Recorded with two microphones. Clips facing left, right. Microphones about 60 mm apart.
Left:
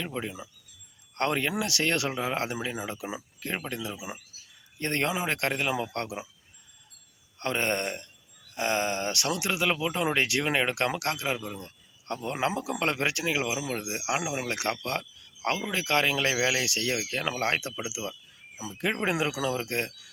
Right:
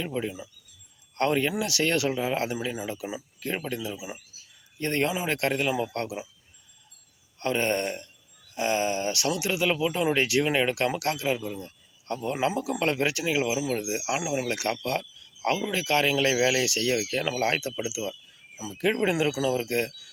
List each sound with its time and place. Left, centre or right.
0.0 s speech: left
7.3 s speech: left
17.8 s a sound: left
19.0 s speech: left